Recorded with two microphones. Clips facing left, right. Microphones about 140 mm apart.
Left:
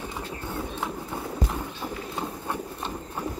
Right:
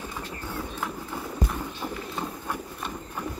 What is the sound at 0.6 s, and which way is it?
Run, 25° left (ahead or behind).